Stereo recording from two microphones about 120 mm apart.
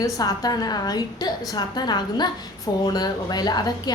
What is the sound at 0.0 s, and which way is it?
A woman's voice, 30° left (ahead or behind).